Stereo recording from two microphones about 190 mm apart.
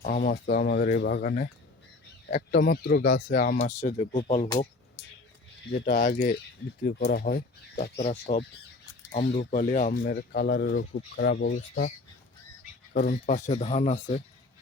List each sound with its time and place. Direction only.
0.0 s speech: 45° left (ahead or behind)
3.6 s speech: 40° left (ahead or behind)
4.1 s speech: 55° left (ahead or behind)
5.8 s speech: 50° left (ahead or behind)
8.0 s speech: 35° left (ahead or behind)
9.3 s speech: 45° left (ahead or behind)
9.9 s speech: 50° left (ahead or behind)
11.5 s speech: 45° left (ahead or behind)
12.9 s speech: 50° left (ahead or behind)